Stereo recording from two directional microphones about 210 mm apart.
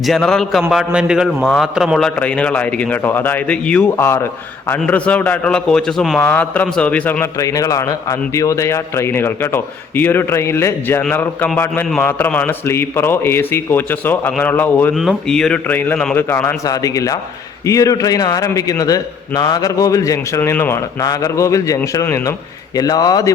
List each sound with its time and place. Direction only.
0.0 s a man's voice: centre (ahead or behind); by 23.3 s 20° left (ahead or behind)